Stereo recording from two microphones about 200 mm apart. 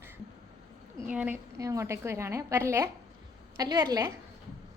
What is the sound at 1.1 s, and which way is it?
A woman's voice, 5° right (ahead or behind).